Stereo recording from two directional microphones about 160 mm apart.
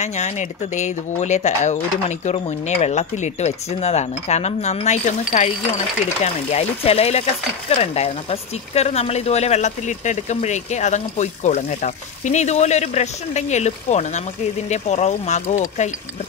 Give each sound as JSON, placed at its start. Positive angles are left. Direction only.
{"t": 0.0, "sound": "speech", "side_deg": 45}